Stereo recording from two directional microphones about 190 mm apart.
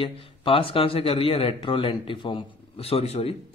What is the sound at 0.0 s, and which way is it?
A man's voice, 25° left (ahead or behind).